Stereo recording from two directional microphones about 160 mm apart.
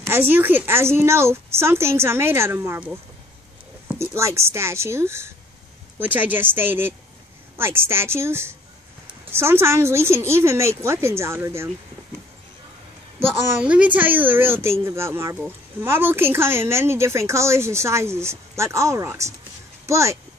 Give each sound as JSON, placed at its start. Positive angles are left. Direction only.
{"t": 0.0, "sound": "speech", "side_deg": -15}
{"t": 3.9, "sound": "speech", "side_deg": -15}
{"t": 13.2, "sound": "speech", "side_deg": -10}